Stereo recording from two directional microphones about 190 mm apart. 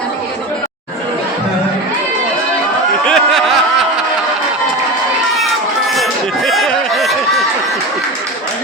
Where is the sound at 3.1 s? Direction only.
Centre (ahead or behind).